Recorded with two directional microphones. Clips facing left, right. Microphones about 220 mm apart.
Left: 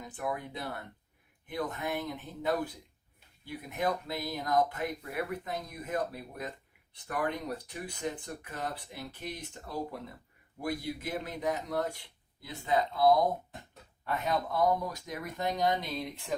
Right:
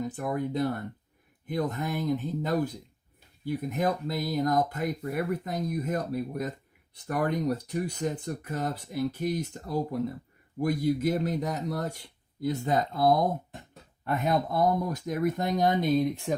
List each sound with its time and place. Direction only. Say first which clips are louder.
0.2 s speech: right 6 dB; 45° right (ahead or behind)